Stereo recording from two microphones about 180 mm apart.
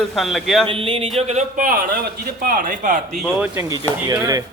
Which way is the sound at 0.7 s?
30° right (ahead or behind).